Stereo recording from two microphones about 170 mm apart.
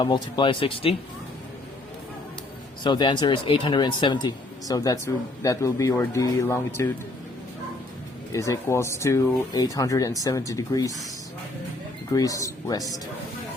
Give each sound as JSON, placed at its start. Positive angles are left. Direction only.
{"t": 0.0, "sound": "speech", "side_deg": 30}
{"t": 2.8, "sound": "speech", "side_deg": 25}
{"t": 8.3, "sound": "speech", "side_deg": 20}
{"t": 12.1, "sound": "speech", "side_deg": 20}